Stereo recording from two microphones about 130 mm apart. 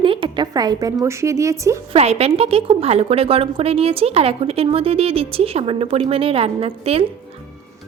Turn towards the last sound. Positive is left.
turn(degrees=-45)  # may be behind; listen again after turning